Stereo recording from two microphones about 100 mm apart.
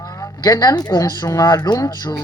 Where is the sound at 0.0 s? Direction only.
35° left (ahead or behind).